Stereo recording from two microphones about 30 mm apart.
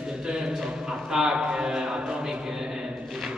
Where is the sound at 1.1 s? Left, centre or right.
Right.